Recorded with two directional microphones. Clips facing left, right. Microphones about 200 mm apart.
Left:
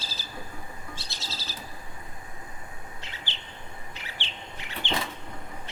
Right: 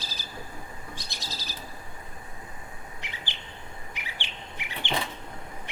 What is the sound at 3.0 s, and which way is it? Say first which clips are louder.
Chirp: right 1 dB; 15° right (ahead or behind).